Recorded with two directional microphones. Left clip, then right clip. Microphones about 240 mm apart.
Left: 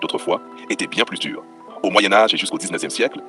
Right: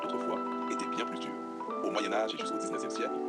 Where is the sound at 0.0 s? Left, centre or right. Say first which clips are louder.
Left 11 dB; left.